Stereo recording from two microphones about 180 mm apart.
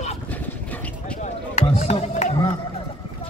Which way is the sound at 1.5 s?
40° left (ahead or behind).